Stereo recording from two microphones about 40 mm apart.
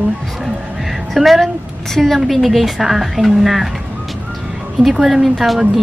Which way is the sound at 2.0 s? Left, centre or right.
Centre.